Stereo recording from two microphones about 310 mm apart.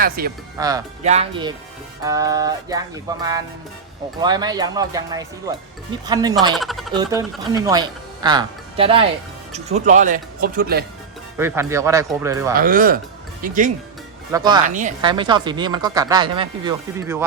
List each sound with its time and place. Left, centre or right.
0.0 s speech: right
0.5 s a woman's voice: centre
6.6 s speech: centre
6.9 s a woman's voice: centre; by 10.8 s right
11.3 s a woman's voice: centre
12.5 s speech: right
14.3 s a woman's voice: centre
14.6 s a woman's voice: right